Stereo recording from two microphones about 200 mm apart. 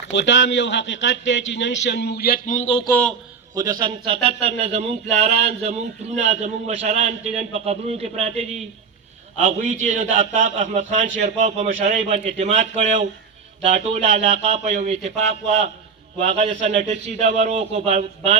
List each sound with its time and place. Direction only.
0.1 s a man's voice: 65° left (ahead or behind); by 2.6 s 45° left (ahead or behind)
2.6 s speech: 25° left (ahead or behind)
2.9 s a man's voice: 5° left (ahead or behind)
3.5 s a man's voice: 20° right (ahead or behind)
16.2 s a man's voice: 30° right (ahead or behind)